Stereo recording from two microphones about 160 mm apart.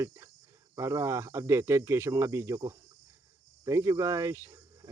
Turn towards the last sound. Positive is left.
turn(degrees=-20)  # may be behind; listen again after turning